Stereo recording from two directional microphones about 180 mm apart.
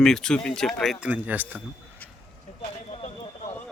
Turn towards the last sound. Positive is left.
turn(degrees=35)  # may be behind; listen again after turning